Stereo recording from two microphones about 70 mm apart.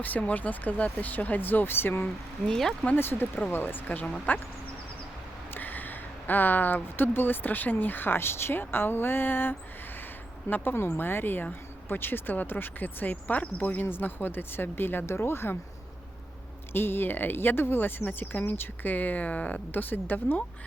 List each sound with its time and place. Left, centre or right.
0.0 s speech: left
2.5 s speech: centre
2.9 s speech: left
5.5 s speech: left
16.7 s speech: left